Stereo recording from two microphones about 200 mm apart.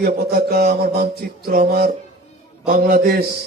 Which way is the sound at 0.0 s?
50° right (ahead or behind).